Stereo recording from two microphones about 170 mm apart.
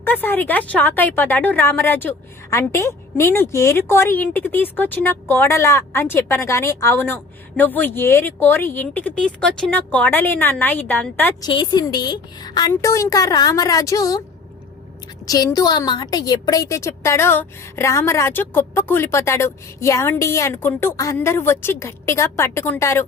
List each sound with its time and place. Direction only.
0.0 s speech: 10° left (ahead or behind)
11.3 s a woman's voice: 25° left (ahead or behind)
15.3 s speech: 20° left (ahead or behind)